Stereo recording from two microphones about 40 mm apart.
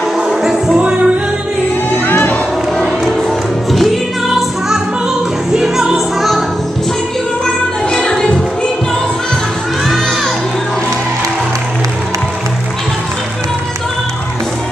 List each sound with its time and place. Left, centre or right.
0.3 s music: centre
0.7 s music: right
3.7 s music: centre
5.5 s music: centre
7.9 s music: centre